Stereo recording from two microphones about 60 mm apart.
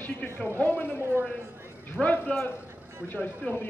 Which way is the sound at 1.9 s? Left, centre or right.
Centre.